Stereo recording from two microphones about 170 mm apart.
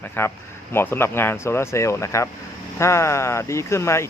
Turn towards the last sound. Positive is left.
turn(degrees=15)  # may be behind; listen again after turning